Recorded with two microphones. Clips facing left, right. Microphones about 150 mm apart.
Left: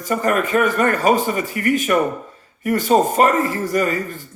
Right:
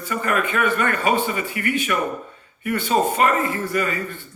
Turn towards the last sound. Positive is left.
turn(degrees=40)  # may be behind; listen again after turning